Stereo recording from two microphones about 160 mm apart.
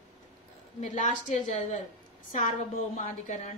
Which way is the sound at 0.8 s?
50° left (ahead or behind).